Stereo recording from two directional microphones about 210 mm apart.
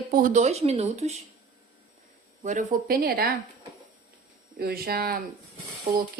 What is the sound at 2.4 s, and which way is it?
Speech, 40° right (ahead or behind).